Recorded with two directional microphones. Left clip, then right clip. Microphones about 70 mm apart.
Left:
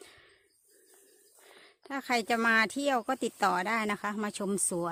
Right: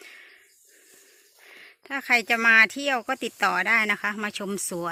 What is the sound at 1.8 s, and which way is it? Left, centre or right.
Speech, centre.